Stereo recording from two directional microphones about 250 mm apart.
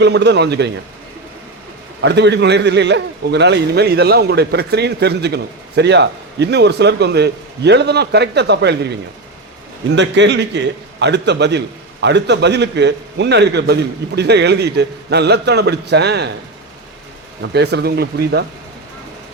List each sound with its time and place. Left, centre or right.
0.0 s a man's voice: right
2.0 s a man's voice: right
17.4 s a man's voice: right